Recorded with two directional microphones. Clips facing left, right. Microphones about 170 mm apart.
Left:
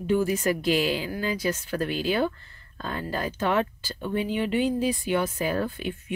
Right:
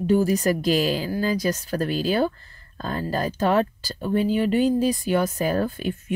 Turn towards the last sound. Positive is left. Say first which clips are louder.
# right 4 dB
turn(degrees=-40)  # may be behind; listen again after turning